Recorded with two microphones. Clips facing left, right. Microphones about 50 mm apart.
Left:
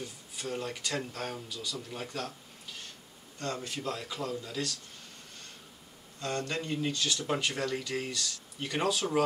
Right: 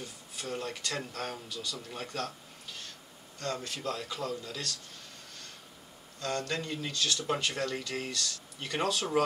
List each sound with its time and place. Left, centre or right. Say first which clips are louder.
0.4 s speech: left 1 dB; centre
3.6 s speech: even; centre
6.2 s a man's voice: even; left; by 9.0 s centre